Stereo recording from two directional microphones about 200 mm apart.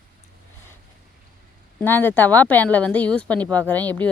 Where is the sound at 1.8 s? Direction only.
10° left (ahead or behind).